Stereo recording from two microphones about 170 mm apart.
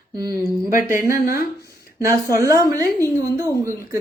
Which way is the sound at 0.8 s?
15° right (ahead or behind).